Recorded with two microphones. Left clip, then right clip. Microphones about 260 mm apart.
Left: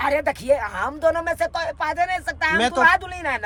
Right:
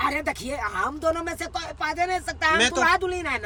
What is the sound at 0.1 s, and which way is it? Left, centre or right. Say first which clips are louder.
Speech: left 8 dB; centre.